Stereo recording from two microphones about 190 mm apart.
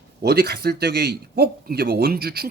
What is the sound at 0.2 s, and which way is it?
Speech, 60° right (ahead or behind).